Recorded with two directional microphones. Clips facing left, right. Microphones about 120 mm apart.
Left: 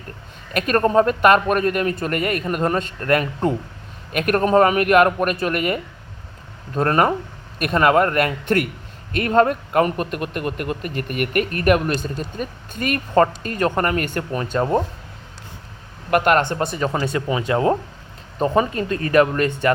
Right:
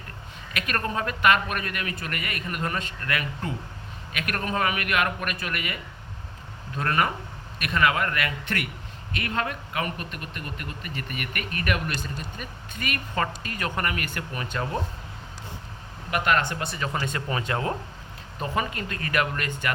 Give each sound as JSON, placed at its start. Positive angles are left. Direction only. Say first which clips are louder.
{"t": 0.5, "sound": "speech", "louder": "left 13 dB", "side_deg": 40}
{"t": 16.0, "sound": "speech", "louder": "left 8 dB", "side_deg": 50}
{"t": 16.8, "sound": "speech", "louder": "left 6 dB", "side_deg": 30}
{"t": 17.2, "sound": "speech", "louder": "left 8 dB", "side_deg": 15}
{"t": 18.3, "sound": "speech", "louder": "left 10 dB", "side_deg": 30}